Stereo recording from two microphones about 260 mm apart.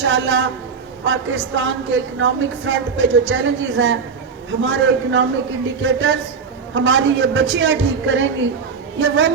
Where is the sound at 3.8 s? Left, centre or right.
Right.